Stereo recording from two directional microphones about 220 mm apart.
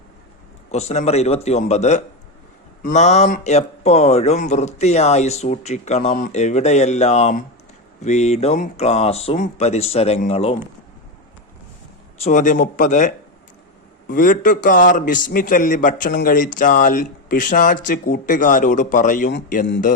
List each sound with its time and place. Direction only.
0.7 s a man's voice: 30° left (ahead or behind)
12.2 s a man's voice: 35° left (ahead or behind)